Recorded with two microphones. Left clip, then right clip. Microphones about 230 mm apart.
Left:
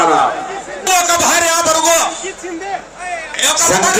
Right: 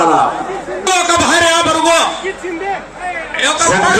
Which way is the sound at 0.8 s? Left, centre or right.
Centre.